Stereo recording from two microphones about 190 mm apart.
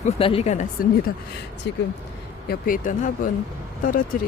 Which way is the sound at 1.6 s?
65° left (ahead or behind).